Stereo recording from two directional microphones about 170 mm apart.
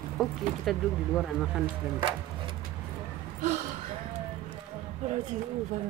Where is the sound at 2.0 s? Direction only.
30° right (ahead or behind).